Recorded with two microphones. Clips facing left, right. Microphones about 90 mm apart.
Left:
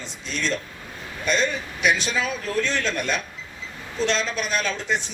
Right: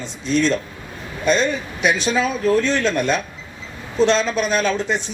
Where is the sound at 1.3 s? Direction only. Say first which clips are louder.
Right 5 dB; 35° right (ahead or behind).